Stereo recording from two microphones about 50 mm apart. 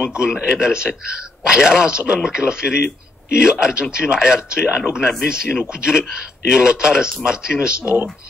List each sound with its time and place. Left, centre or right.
0.1 s speech: centre